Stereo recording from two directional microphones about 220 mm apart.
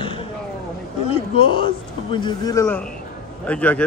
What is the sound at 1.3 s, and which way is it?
A man's voice, 25° left (ahead or behind).